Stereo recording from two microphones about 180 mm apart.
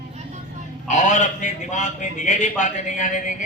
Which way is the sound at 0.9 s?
40° left (ahead or behind).